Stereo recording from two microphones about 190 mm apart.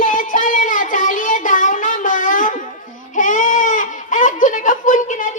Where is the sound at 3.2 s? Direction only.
45° left (ahead or behind).